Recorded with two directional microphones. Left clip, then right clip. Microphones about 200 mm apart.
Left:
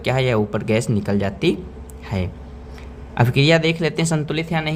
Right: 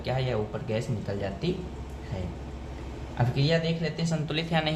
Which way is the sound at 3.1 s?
45° left (ahead or behind).